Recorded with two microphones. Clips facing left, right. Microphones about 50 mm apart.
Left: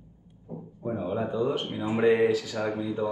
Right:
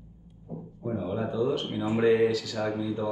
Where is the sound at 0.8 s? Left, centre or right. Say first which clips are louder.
Left 1 dB; left.